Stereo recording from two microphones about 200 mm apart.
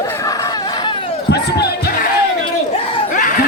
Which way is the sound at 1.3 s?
55° left (ahead or behind).